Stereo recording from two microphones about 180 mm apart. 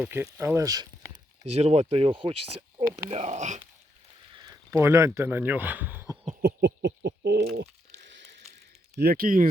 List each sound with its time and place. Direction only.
0.0 s speech: 10° right (ahead or behind)
1.5 s speech: 35° right (ahead or behind)
3.1 s speech: 40° right (ahead or behind)
4.4 s speech: 20° right (ahead or behind)
6.4 s a sound: 70° right (ahead or behind)
9.0 s speech: 55° right (ahead or behind)